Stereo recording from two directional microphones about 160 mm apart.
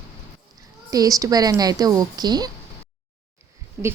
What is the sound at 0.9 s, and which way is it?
A woman's voice, 20° right (ahead or behind).